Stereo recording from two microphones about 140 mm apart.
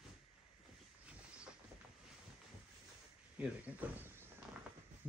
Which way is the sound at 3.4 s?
10° right (ahead or behind).